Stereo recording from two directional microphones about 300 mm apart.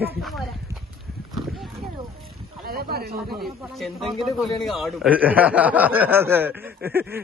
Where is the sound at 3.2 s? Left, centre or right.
Centre.